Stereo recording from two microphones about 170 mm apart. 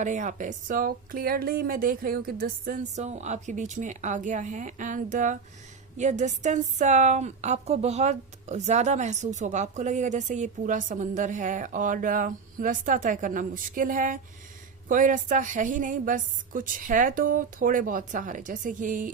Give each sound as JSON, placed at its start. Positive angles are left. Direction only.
{"t": 0.0, "sound": "a woman's voice", "side_deg": -45}